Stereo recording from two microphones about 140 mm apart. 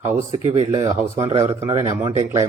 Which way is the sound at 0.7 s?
25° right (ahead or behind).